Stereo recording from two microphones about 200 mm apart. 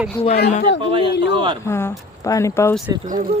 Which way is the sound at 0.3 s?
50° left (ahead or behind).